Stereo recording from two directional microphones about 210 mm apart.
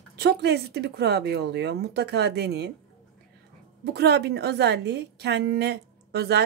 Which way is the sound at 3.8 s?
50° right (ahead or behind).